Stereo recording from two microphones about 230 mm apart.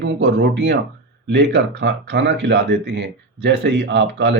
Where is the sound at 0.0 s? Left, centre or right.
Right.